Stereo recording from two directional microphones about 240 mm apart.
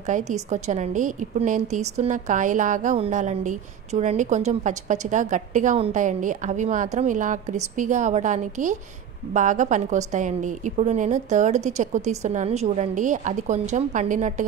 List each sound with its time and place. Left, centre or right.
0.0 s a woman's voice: right